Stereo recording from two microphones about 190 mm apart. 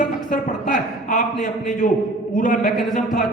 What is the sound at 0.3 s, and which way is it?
A man's voice, 45° left (ahead or behind).